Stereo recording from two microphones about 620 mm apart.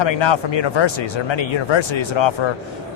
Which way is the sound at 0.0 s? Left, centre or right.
Left.